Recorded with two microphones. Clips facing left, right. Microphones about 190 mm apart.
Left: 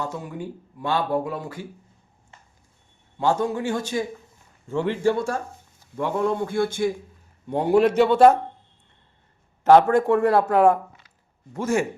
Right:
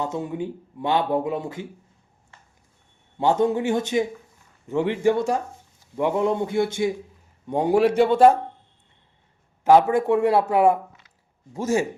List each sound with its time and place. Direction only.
0.0 s speech: 25° right (ahead or behind)
3.2 s speech: 20° right (ahead or behind)
9.6 s speech: 5° right (ahead or behind)